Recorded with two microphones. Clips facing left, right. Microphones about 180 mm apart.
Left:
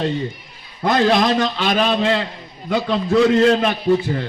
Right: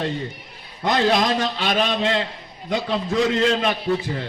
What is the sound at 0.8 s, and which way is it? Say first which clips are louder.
A man's voice: left 3 dB; 40° left (ahead or behind).